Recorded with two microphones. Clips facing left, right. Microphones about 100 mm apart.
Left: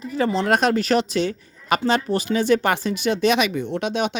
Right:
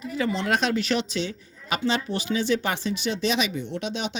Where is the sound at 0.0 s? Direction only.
35° left (ahead or behind).